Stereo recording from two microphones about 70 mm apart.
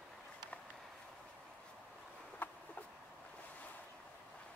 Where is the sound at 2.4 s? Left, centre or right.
Left.